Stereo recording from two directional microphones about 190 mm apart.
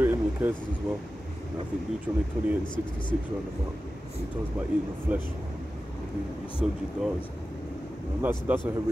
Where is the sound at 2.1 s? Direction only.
10° right (ahead or behind).